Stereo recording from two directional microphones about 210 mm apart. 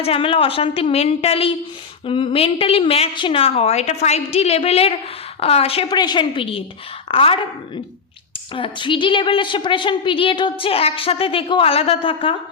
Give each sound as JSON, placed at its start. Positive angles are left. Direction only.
{"t": 0.0, "sound": "a woman's voice", "side_deg": 25}
{"t": 8.5, "sound": "a woman's voice", "side_deg": 25}